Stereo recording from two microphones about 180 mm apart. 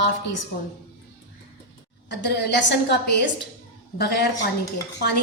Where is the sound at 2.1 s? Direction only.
70° left (ahead or behind).